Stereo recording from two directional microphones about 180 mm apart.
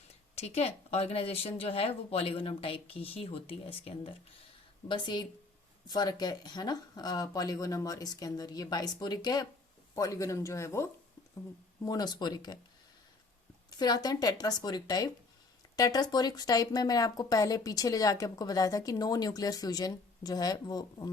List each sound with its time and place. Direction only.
0.3 s speech: 35° left (ahead or behind); by 10.8 s 15° left (ahead or behind)
11.9 s speech: 20° left (ahead or behind)
13.7 s speech: 20° left (ahead or behind)